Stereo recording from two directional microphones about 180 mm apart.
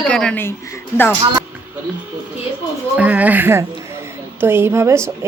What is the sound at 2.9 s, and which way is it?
Speech, 10° right (ahead or behind).